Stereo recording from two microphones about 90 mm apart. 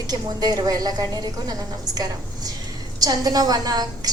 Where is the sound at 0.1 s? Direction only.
45° right (ahead or behind).